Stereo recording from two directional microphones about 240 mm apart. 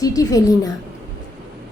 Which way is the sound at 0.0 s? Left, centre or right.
Centre.